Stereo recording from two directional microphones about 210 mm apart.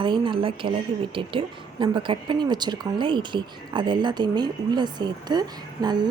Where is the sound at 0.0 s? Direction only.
20° right (ahead or behind).